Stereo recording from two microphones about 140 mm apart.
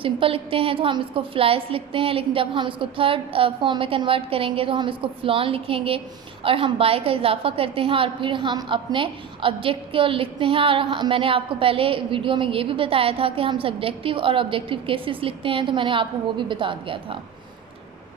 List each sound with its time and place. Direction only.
0.0 s a woman's voice: 40° right (ahead or behind)